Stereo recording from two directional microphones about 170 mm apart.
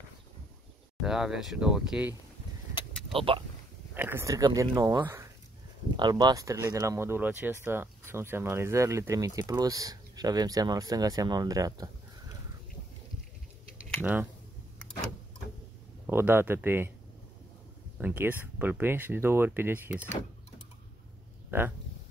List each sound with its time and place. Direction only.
1.0 s speech: 5° right (ahead or behind)
3.1 s speech: 30° right (ahead or behind)
3.9 s speech: 10° right (ahead or behind)
14.0 s speech: 10° right (ahead or behind)
16.1 s speech: 15° right (ahead or behind)
17.9 s speech: 10° right (ahead or behind)
21.5 s speech: 10° right (ahead or behind)